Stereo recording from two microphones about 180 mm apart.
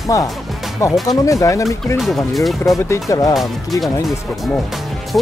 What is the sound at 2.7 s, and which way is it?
Speech, 15° left (ahead or behind).